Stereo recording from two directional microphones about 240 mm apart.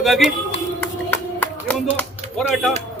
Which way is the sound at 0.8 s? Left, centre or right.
Centre.